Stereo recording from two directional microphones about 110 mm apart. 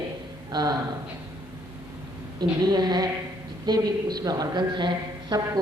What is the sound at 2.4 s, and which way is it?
Speech, 40° right (ahead or behind).